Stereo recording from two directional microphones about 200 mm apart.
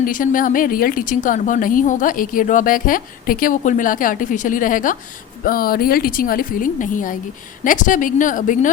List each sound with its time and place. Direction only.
0.0 s a woman's voice: 40° left (ahead or behind)